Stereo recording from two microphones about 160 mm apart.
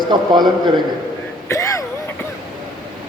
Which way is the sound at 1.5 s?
20° left (ahead or behind).